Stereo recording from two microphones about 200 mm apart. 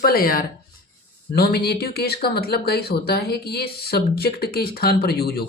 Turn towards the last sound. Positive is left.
turn(degrees=50)  # may be behind; listen again after turning